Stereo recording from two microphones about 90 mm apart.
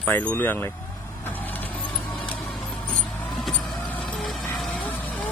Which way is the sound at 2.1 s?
5° left (ahead or behind).